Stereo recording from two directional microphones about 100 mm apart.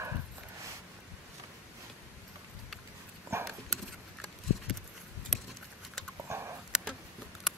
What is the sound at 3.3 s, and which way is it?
Clip-clop, 25° right (ahead or behind).